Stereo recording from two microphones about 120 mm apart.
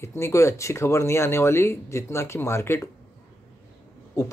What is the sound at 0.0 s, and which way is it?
Speech, 25° left (ahead or behind).